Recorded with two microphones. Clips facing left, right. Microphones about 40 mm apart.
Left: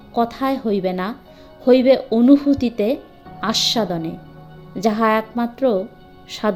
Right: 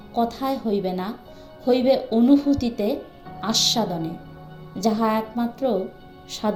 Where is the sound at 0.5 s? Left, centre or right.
Left.